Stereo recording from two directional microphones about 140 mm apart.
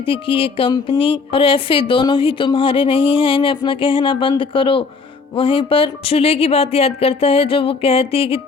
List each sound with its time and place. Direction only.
0.0 s speech: 40° left (ahead or behind)